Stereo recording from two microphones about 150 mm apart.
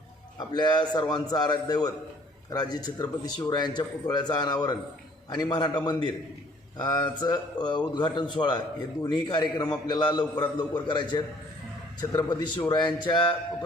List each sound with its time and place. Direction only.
0.3 s a man's voice: 30° left (ahead or behind)